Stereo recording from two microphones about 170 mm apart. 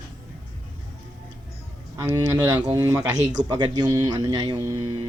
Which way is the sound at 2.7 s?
20° right (ahead or behind).